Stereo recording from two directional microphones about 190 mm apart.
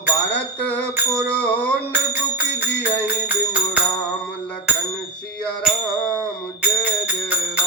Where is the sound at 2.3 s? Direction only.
10° right (ahead or behind).